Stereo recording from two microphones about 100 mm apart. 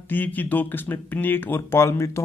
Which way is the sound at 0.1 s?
20° left (ahead or behind).